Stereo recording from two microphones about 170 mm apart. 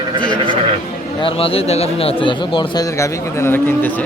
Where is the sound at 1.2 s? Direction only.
30° left (ahead or behind); by 3.9 s 10° left (ahead or behind).